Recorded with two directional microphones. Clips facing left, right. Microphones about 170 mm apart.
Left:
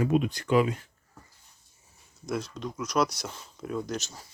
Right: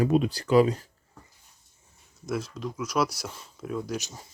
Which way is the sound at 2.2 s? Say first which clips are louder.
Right 1 dB; 5° right (ahead or behind).